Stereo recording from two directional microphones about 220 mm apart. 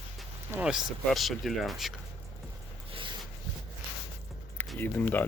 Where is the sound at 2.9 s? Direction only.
20° right (ahead or behind).